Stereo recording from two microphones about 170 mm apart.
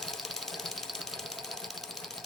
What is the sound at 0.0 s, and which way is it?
Engine knocking, centre (ahead or behind).